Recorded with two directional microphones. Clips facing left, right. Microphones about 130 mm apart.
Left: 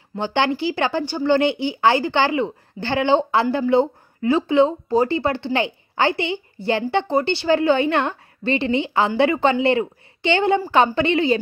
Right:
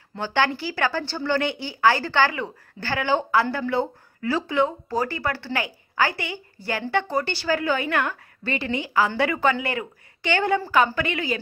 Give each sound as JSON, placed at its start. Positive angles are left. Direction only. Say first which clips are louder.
{"t": 0.2, "sound": "speech", "louder": "left 3 dB", "side_deg": 20}